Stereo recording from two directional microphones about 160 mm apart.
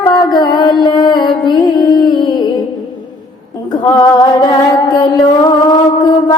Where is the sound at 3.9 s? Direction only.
25° left (ahead or behind).